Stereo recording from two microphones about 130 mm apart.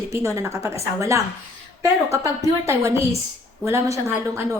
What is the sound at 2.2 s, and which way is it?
A woman's voice, 25° right (ahead or behind).